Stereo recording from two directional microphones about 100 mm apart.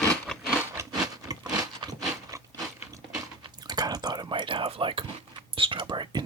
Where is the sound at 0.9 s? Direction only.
40° right (ahead or behind).